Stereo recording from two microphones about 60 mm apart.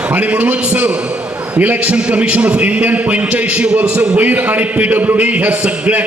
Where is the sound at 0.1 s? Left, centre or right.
Right.